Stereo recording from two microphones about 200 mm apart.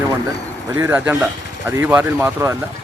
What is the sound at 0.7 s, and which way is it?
Speech, 10° right (ahead or behind).